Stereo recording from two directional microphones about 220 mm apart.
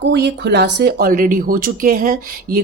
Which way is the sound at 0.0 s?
50° right (ahead or behind).